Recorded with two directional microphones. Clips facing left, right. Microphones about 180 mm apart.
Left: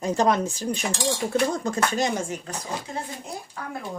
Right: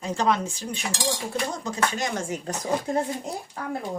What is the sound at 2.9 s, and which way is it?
Speech, 50° right (ahead or behind).